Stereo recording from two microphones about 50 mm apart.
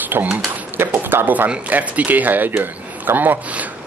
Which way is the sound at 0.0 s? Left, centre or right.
Right.